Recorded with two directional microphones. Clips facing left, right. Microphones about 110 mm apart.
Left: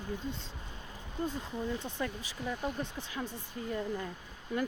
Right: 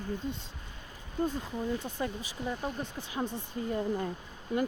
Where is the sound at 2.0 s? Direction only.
15° right (ahead or behind).